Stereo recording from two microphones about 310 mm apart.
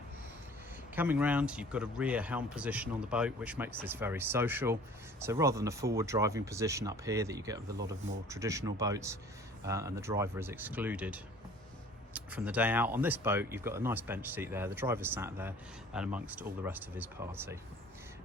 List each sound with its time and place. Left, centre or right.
0.9 s speech: centre